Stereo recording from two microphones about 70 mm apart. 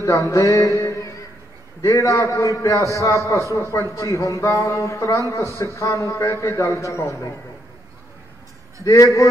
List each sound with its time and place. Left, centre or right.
0.0 s music: left
1.8 s a man's voice: left
8.8 s a man's voice: left